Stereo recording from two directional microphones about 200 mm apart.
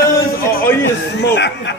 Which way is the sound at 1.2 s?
60° left (ahead or behind).